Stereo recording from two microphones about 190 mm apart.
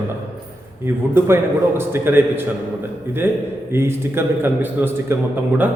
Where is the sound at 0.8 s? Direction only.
10° right (ahead or behind).